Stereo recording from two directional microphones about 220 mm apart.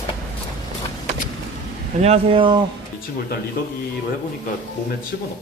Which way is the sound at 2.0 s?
25° right (ahead or behind).